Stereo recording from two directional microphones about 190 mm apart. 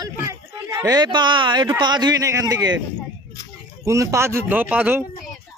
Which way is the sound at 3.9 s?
15° right (ahead or behind).